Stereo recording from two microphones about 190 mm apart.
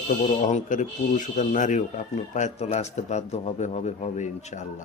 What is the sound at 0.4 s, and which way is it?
Speech, 40° left (ahead or behind).